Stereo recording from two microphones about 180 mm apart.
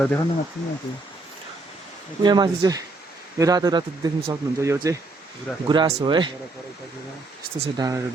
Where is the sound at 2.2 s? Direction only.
25° right (ahead or behind).